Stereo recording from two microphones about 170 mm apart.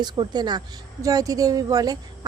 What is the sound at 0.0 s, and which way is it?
A woman's voice, 25° right (ahead or behind).